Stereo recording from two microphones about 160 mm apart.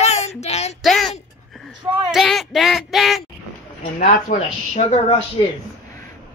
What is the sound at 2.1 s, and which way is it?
Child singing, centre (ahead or behind).